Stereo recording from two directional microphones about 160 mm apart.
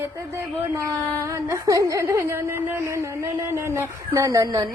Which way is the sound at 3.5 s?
15° right (ahead or behind).